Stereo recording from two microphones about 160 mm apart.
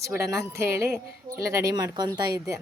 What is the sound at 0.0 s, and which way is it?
Speech, 20° right (ahead or behind).